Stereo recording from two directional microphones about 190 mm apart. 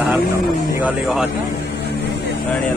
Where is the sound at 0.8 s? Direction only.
5° right (ahead or behind).